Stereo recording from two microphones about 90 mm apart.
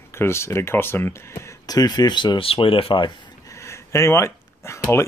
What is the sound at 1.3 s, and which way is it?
Speech, 40° left (ahead or behind).